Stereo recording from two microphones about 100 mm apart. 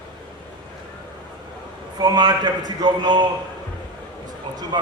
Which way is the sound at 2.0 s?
45° right (ahead or behind).